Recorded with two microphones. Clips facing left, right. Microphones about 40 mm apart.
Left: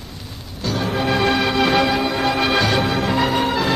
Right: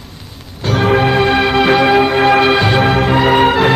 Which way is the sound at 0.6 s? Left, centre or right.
Right.